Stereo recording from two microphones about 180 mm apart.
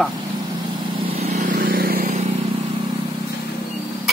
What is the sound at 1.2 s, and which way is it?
Vehicle, 40° right (ahead or behind).